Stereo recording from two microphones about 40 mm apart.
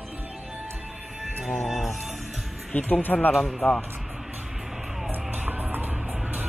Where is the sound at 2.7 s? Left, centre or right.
Left.